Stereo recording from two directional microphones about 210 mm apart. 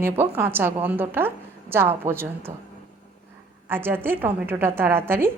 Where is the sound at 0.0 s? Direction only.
10° right (ahead or behind).